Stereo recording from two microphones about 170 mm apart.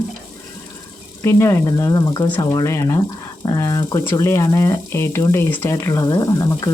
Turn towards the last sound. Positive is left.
turn(degrees=20)  # may be behind; listen again after turning